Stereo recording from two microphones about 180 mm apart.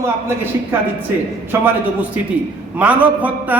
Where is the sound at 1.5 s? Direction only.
15° right (ahead or behind).